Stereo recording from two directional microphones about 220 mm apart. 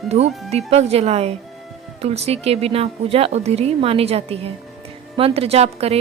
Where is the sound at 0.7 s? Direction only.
30° right (ahead or behind).